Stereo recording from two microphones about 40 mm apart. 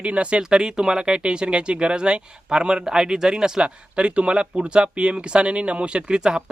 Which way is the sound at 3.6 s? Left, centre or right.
Right.